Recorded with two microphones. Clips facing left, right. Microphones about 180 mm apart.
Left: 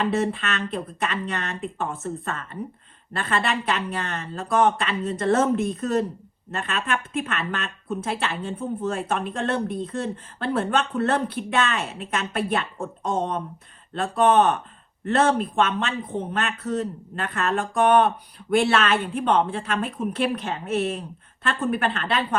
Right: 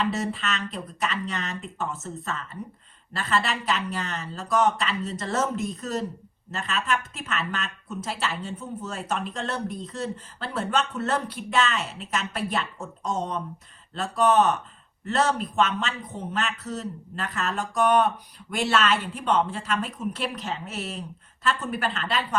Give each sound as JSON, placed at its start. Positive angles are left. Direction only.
{"t": 0.0, "sound": "speech", "side_deg": 55}